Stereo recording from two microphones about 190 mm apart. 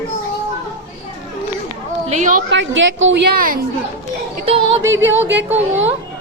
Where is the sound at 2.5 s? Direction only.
75° right (ahead or behind); by 3.5 s 50° right (ahead or behind).